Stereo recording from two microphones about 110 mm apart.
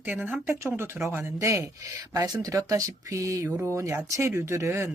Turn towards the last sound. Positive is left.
turn(degrees=-25)  # may be behind; listen again after turning